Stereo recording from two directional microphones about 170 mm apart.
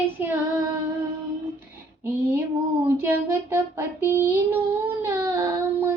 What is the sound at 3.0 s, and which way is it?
Child singing, 15° right (ahead or behind).